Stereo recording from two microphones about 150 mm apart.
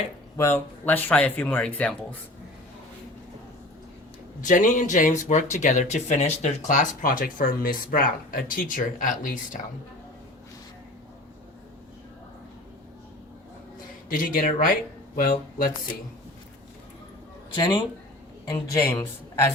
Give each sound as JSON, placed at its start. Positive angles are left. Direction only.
{"t": 0.3, "sound": "speech", "side_deg": 15}
{"t": 4.4, "sound": "speech", "side_deg": 60}
{"t": 14.1, "sound": "speech", "side_deg": 65}
{"t": 17.6, "sound": "speech", "side_deg": 30}